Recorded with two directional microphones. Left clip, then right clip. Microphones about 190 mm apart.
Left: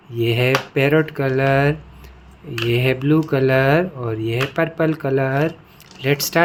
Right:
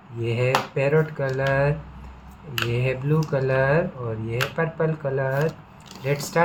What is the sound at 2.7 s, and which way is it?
Speech, 55° left (ahead or behind).